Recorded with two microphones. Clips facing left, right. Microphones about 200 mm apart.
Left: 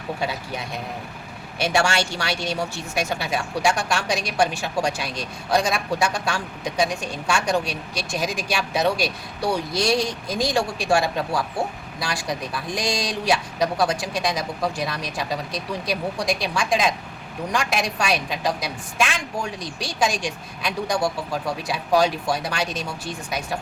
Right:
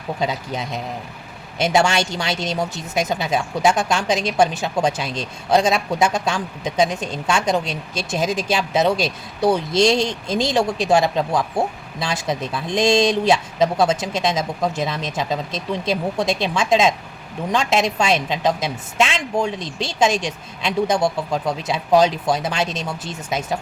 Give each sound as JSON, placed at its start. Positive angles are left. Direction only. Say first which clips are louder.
{"t": 0.2, "sound": "speech", "louder": "right 4 dB", "side_deg": -20}